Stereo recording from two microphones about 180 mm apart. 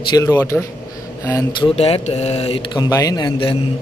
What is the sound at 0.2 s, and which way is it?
Speech, 15° left (ahead or behind).